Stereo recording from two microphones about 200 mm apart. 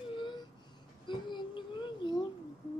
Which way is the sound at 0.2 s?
25° left (ahead or behind).